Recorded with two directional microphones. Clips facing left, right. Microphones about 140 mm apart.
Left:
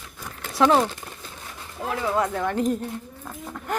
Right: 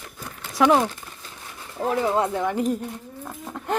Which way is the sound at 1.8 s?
35° right (ahead or behind).